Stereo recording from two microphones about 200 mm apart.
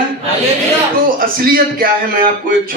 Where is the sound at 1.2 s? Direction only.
45° right (ahead or behind).